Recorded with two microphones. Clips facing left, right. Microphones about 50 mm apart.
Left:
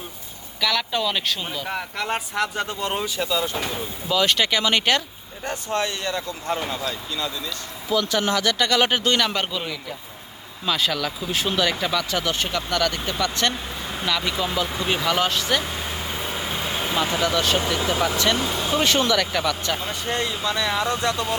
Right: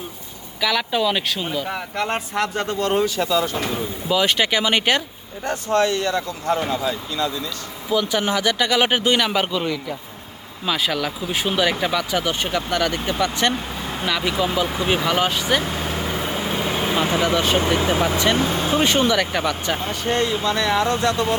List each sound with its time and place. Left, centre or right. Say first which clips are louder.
0.6 s speech: right 3 dB; centre
2.0 s speech: right 2 dB; centre
2.6 s speech: right 6 dB; centre
4.1 s speech: right 2 dB; centre
5.7 s speech: right 7 dB; left
6.1 s speech: right 4 dB; right
7.9 s speech: right 1 dB; centre
15.6 s vehicle: right 4 dB; right
17.6 s speech: right 3 dB; right
18.3 s speech: right 3 dB; right
18.9 s speech: right 2 dB; right
19.8 s speech: right 4 dB; right